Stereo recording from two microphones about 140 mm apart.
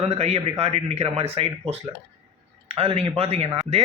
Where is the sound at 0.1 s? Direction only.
50° right (ahead or behind).